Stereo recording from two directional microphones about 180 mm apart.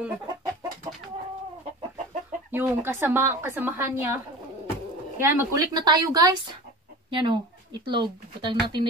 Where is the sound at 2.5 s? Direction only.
10° right (ahead or behind).